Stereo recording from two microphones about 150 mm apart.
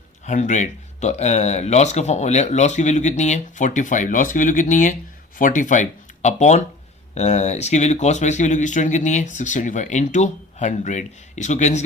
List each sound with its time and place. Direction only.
0.3 s speech: 55° left (ahead or behind)